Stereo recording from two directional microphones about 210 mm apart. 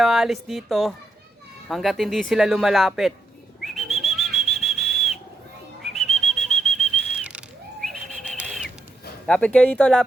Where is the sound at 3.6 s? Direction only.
Centre (ahead or behind).